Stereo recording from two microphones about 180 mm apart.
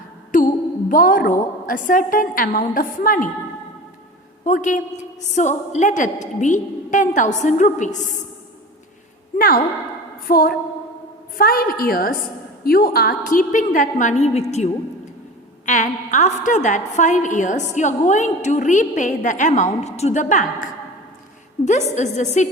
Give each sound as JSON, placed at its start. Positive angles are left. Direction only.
{"t": 0.3, "sound": "music", "side_deg": 50}
{"t": 0.9, "sound": "a woman's voice", "side_deg": 50}
{"t": 4.4, "sound": "a woman's voice", "side_deg": 45}
{"t": 10.2, "sound": "a woman's voice", "side_deg": 55}
{"t": 15.6, "sound": "a woman's voice", "side_deg": 45}